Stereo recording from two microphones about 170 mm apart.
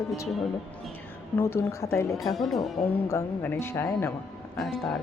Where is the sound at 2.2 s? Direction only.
Centre (ahead or behind).